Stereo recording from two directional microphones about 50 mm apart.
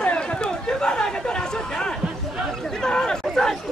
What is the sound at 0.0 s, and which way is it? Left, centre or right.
Chatter, left.